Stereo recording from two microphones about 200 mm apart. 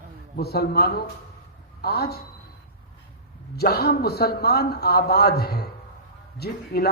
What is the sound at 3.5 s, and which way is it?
A man's voice, 50° left (ahead or behind).